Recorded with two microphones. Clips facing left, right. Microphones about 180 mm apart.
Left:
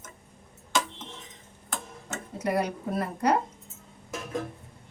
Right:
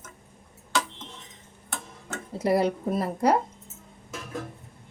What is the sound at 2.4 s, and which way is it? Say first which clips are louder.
Speech: right 5 dB; 30° right (ahead or behind).